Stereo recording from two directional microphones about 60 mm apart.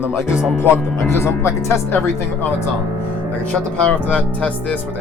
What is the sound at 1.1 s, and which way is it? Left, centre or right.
Speech, left.